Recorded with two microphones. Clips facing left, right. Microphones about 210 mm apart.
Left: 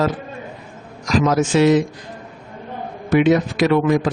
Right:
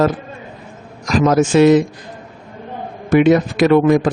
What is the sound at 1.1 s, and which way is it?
Speech, 50° right (ahead or behind).